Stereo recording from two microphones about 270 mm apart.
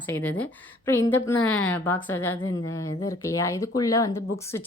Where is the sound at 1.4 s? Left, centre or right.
Left.